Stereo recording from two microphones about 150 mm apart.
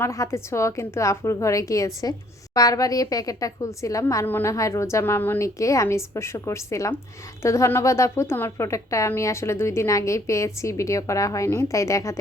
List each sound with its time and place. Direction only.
0.0 s a woman's voice: 20° left (ahead or behind)